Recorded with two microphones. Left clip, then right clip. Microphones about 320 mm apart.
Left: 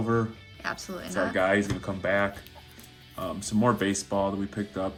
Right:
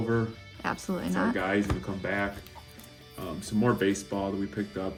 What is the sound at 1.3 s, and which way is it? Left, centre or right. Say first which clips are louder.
Speech: left 4 dB; centre.